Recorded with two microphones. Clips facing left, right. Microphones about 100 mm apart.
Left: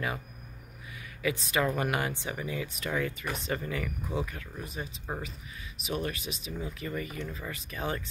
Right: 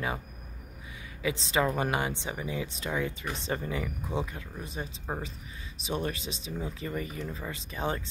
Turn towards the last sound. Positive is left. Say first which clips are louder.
# right 2 dB
turn(degrees=-25)  # may be behind; listen again after turning